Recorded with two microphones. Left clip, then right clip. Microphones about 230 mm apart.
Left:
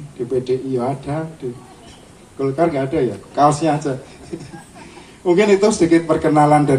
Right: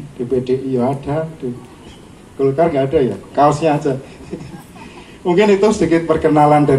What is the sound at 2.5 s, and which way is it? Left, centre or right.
A man's voice, left.